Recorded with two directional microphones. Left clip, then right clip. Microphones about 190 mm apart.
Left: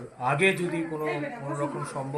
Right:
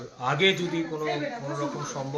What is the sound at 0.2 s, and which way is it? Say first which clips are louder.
Speech: even; 20° left (ahead or behind).